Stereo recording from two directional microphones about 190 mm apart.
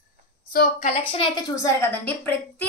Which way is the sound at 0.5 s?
40° left (ahead or behind).